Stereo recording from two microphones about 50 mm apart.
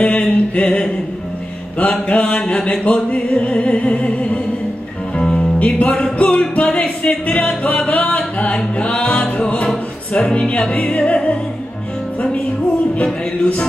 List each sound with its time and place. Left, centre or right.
0.0 s a sound: left
1.8 s mantra: left
5.2 s music: centre
5.6 s mantra: left
6.1 s music: left
10.1 s mantra: left
12.9 s mantra: left